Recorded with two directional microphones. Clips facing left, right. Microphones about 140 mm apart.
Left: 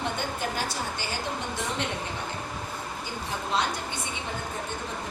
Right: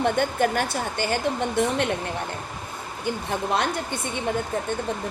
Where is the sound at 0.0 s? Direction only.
55° right (ahead or behind).